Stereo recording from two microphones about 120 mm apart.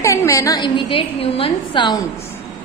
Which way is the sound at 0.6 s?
45° left (ahead or behind).